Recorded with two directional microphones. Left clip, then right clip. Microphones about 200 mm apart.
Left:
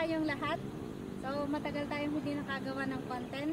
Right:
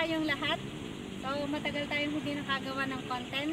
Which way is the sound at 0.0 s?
Centre (ahead or behind).